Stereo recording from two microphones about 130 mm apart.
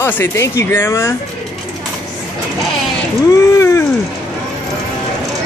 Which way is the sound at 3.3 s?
20° left (ahead or behind).